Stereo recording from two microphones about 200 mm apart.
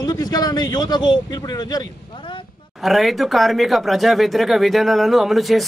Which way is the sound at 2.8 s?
Centre (ahead or behind).